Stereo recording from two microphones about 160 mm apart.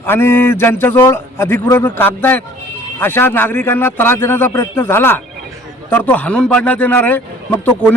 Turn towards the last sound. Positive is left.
turn(degrees=10)  # may be behind; listen again after turning